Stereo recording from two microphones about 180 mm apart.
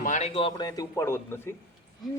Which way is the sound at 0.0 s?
40° left (ahead or behind).